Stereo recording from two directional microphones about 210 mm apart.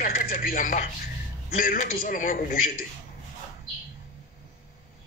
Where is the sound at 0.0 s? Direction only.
40° left (ahead or behind).